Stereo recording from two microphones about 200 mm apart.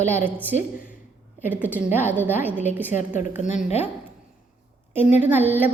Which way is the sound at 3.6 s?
30° left (ahead or behind).